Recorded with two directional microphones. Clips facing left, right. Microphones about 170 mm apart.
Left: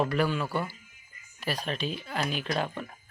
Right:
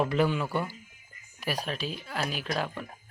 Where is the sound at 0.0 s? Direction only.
20° right (ahead or behind).